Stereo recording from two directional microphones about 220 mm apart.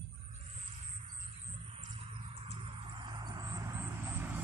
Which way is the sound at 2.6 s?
20° right (ahead or behind).